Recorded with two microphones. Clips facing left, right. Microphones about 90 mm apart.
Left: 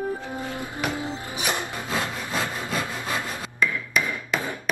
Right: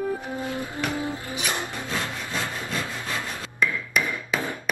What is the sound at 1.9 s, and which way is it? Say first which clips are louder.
Sawing: left 3 dB; 20° left (ahead or behind).